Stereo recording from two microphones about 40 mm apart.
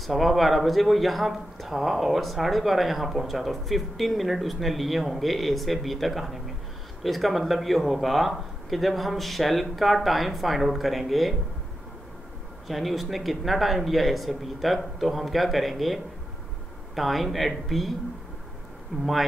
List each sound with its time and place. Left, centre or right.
0.0 s speech: centre
12.6 s speech: centre
18.9 s speech: centre